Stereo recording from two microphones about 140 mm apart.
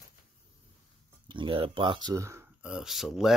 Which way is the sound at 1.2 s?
35° right (ahead or behind).